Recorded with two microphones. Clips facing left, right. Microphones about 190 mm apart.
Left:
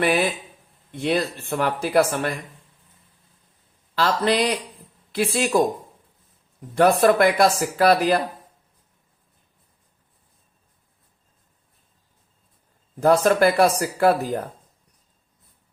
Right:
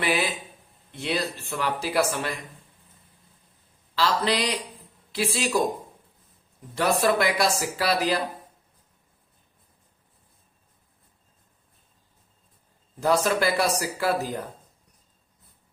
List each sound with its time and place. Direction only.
0.0 s speech: 50° left (ahead or behind)
3.9 s speech: 50° left (ahead or behind)
6.7 s speech: 55° left (ahead or behind)
13.0 s speech: 50° left (ahead or behind)